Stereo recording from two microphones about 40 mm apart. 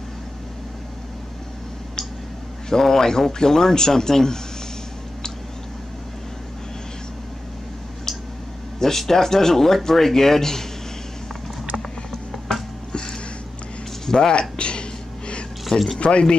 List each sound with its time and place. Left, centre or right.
2.7 s a man's voice: centre
8.7 s a man's voice: centre
14.0 s a sound: centre
16.0 s speech: left